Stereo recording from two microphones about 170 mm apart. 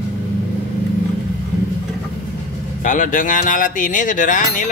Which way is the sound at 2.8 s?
50° left (ahead or behind).